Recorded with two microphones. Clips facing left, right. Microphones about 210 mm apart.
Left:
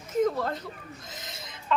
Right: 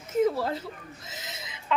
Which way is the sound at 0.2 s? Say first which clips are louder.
Right 1 dB; 5° right (ahead or behind).